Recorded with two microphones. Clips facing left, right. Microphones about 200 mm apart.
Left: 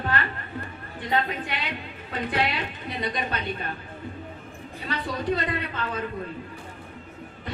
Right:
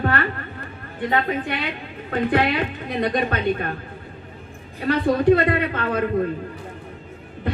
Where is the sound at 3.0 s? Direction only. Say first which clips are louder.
Right 8 dB; 60° right (ahead or behind).